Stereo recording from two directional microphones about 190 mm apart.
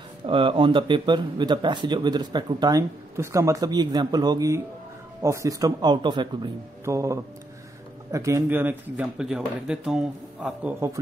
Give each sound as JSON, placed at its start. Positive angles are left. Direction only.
{"t": 0.3, "sound": "speech", "side_deg": -25}